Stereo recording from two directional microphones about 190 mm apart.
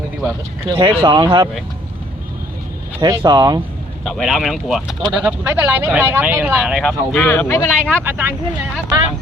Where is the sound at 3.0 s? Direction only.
20° right (ahead or behind).